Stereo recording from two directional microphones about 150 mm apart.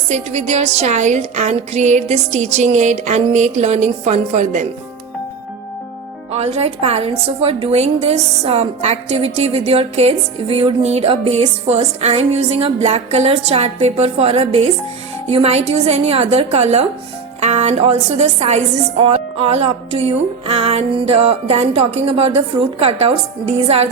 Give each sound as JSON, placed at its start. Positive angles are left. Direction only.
{"t": 0.1, "sound": "a woman's voice", "side_deg": -50}
{"t": 6.3, "sound": "a woman's voice", "side_deg": -45}